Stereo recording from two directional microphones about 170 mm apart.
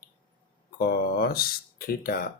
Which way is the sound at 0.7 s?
65° left (ahead or behind).